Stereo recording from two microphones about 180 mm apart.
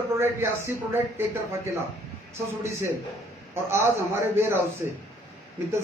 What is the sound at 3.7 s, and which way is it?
Speech, 15° right (ahead or behind).